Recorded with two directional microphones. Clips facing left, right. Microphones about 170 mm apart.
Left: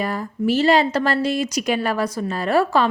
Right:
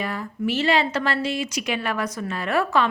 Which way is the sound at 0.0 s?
40° left (ahead or behind).